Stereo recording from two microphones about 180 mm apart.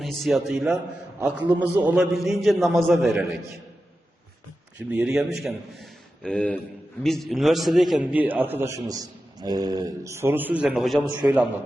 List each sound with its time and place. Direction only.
0.0 s a man's voice: centre (ahead or behind)
4.9 s a man's voice: 5° right (ahead or behind)